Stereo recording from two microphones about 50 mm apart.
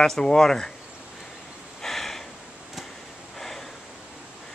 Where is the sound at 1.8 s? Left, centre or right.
Centre.